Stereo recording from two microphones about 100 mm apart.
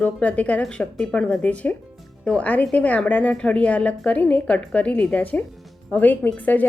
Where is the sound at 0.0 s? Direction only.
15° left (ahead or behind).